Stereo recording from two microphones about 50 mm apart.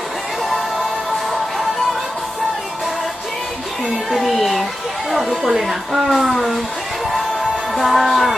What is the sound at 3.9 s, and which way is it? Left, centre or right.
Music, centre.